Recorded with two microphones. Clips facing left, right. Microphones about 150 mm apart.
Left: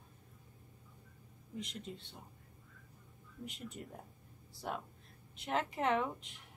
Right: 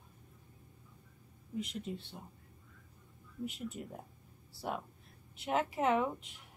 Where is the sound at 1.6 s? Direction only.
5° right (ahead or behind).